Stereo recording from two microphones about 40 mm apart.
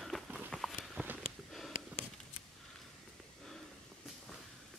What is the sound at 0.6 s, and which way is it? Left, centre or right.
Walk, centre.